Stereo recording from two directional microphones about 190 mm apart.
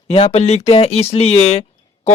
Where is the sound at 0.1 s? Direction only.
35° left (ahead or behind).